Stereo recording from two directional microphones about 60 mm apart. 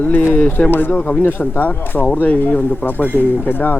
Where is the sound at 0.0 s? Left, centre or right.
Left.